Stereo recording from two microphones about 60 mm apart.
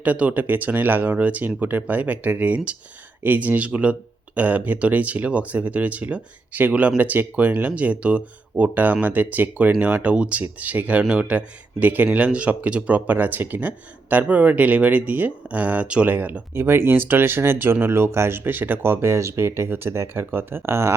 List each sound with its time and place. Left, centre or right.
0.0 s speech: right
16.6 s speech: right
19.0 s speech: right